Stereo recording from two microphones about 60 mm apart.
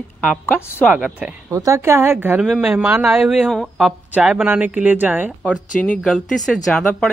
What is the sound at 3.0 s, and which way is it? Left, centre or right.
Speech, centre.